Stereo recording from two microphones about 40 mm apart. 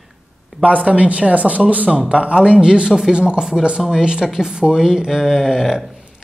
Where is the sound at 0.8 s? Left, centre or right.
Right; by 5.8 s centre.